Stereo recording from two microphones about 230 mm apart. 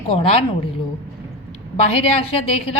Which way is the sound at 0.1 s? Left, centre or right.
Left.